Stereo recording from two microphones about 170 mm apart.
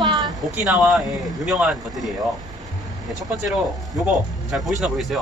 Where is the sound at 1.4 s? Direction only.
5° right (ahead or behind).